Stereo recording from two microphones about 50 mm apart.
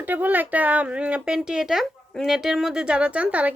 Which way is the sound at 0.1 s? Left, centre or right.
Right.